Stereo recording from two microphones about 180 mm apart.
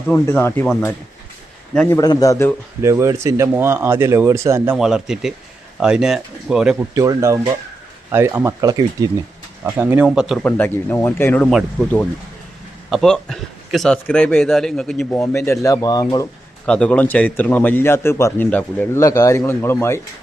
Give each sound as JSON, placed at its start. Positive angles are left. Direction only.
{"t": 0.1, "sound": "a man's voice", "side_deg": 10}
{"t": 1.7, "sound": "a man's voice", "side_deg": 5}
{"t": 2.0, "sound": "speech", "side_deg": 20}
{"t": 2.8, "sound": "a man's voice", "side_deg": -15}
{"t": 6.9, "sound": "speech", "side_deg": -20}
{"t": 9.6, "sound": "a man's voice", "side_deg": -10}
{"t": 12.9, "sound": "a man's voice", "side_deg": 0}
{"t": 15.2, "sound": "speech", "side_deg": 15}
{"t": 16.6, "sound": "a man's voice", "side_deg": 5}
{"t": 19.0, "sound": "a man's voice", "side_deg": 20}